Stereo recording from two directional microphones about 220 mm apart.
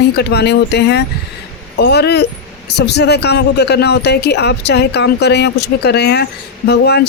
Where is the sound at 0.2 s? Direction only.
50° left (ahead or behind).